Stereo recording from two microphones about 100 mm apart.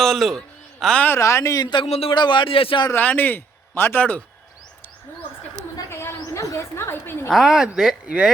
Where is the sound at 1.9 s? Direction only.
80° left.